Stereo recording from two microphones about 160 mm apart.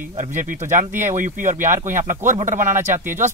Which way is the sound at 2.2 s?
50° right (ahead or behind).